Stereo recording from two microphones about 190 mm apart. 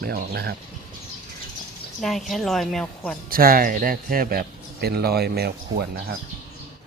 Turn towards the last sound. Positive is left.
turn(degrees=-60)  # may be behind; listen again after turning